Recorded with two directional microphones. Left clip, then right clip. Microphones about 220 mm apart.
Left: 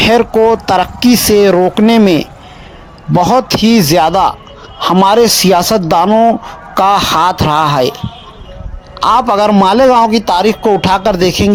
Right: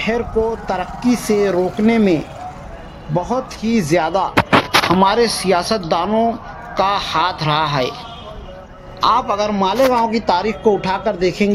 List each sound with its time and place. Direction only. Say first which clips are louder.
0.0 s a man's voice: left 10 dB; 45° left (ahead or behind)
5.0 s speech: left 7 dB; 55° left (ahead or behind)
9.0 s a man's voice: left 6 dB; 55° left (ahead or behind); by 11.5 s 35° left (ahead or behind)